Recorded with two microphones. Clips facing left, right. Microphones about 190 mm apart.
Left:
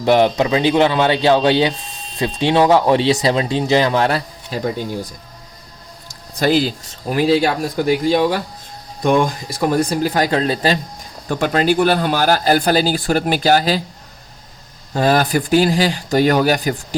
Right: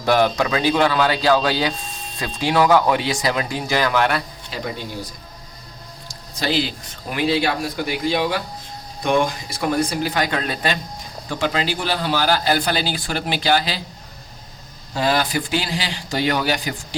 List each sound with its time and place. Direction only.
0.0 s speech: 20° left (ahead or behind)
6.4 s speech: 45° left (ahead or behind)
11.3 s speech: 50° left (ahead or behind)
14.9 s speech: 45° left (ahead or behind)